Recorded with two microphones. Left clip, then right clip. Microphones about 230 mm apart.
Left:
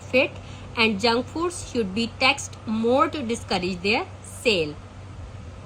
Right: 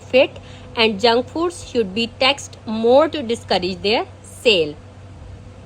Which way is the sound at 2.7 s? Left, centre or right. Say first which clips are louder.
Right 7 dB; right.